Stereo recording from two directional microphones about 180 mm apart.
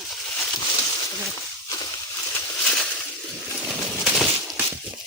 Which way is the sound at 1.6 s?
20° left (ahead or behind).